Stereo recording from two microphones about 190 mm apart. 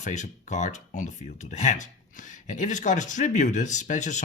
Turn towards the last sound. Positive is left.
turn(degrees=40)  # may be behind; listen again after turning